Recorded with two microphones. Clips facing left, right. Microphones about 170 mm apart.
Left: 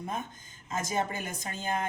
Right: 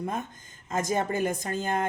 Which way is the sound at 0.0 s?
50° right (ahead or behind).